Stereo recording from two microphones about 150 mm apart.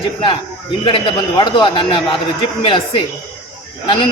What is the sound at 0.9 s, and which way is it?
A man's voice, 35° left (ahead or behind).